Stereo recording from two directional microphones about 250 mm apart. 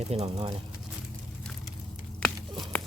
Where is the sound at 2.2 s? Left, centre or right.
Centre.